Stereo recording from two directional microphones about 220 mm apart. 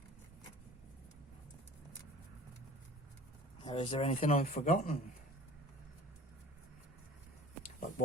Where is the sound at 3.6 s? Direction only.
25° left (ahead or behind).